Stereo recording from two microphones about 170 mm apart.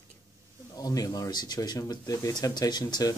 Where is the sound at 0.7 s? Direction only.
20° left (ahead or behind).